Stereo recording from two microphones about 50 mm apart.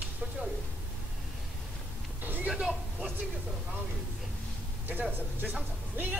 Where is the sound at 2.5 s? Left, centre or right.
Centre.